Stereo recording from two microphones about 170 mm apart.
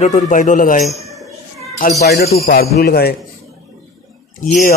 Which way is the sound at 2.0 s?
70° left (ahead or behind).